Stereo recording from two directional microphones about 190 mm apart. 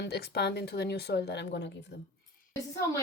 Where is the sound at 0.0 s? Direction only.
60° left (ahead or behind).